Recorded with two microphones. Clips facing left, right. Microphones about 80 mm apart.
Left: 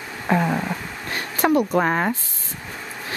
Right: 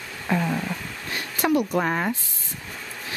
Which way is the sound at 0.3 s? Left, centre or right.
Left.